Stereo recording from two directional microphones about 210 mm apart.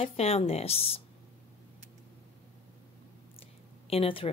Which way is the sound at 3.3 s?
25° left (ahead or behind).